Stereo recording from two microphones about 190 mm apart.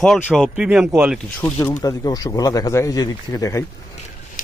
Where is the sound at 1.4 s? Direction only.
10° left (ahead or behind).